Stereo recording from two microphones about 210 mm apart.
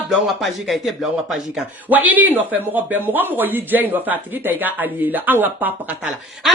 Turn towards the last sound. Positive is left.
turn(degrees=0)  # may be behind; listen again after turning